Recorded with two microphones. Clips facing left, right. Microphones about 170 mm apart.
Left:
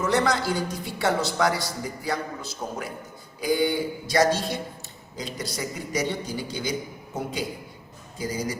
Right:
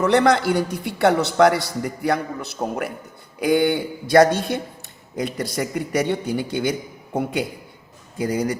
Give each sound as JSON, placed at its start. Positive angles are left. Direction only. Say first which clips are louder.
{"t": 0.0, "sound": "a man's voice", "louder": "right 7 dB", "side_deg": -60}